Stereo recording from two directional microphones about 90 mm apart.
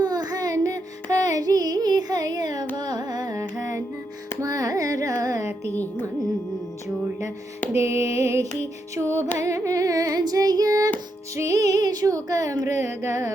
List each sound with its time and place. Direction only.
0.0 s a sound: 45° right (ahead or behind)
1.1 s carnatic music: 40° right (ahead or behind)
3.5 s music: 35° right (ahead or behind)
4.4 s carnatic music: 40° right (ahead or behind)
5.7 s a woman's voice: 20° left (ahead or behind)
7.7 s a sound: 30° right (ahead or behind)
9.4 s female singing: 35° right (ahead or behind)
11.3 s music: 40° right (ahead or behind)